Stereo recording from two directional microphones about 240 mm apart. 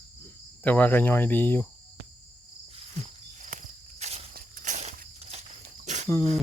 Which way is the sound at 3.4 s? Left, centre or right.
Right.